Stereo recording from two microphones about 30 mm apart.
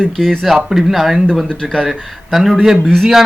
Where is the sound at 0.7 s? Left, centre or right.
Centre.